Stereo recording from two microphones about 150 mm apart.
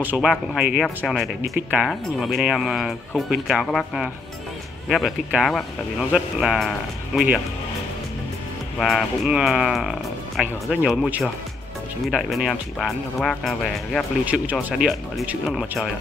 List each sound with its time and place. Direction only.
0.0 s speech: 10° right (ahead or behind)
8.7 s speech: centre (ahead or behind)
14.2 s speech: 10° right (ahead or behind)